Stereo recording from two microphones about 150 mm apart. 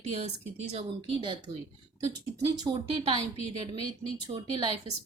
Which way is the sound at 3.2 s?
40° left (ahead or behind).